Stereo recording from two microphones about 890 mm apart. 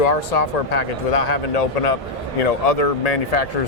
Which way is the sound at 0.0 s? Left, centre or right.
Left.